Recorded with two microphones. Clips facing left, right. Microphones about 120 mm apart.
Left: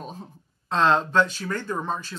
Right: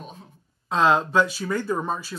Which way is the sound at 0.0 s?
35° left (ahead or behind).